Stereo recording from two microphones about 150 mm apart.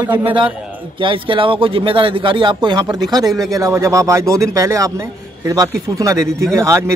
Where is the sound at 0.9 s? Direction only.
35° right (ahead or behind).